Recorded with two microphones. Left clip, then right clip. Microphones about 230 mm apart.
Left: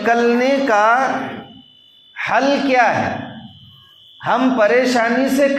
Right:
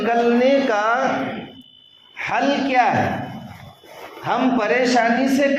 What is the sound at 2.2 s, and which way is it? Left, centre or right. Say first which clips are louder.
Speech: left 4 dB; left.